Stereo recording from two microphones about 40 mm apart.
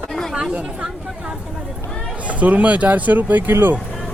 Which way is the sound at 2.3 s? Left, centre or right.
Right.